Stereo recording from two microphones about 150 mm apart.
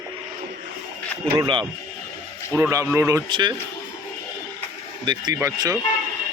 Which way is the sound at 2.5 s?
15° right (ahead or behind).